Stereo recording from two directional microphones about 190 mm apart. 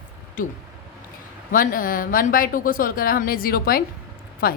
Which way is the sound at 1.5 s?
50° left (ahead or behind).